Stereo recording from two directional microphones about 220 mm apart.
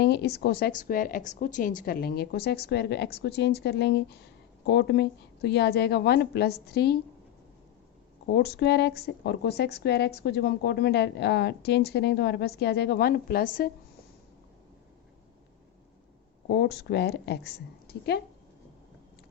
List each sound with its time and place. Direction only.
0.0 s a woman's voice: 50° left (ahead or behind)
8.3 s a woman's voice: 50° left (ahead or behind)
16.5 s a woman's voice: 50° left (ahead or behind)